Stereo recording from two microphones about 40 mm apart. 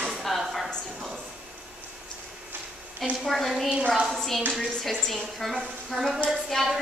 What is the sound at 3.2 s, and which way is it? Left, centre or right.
Speech, centre.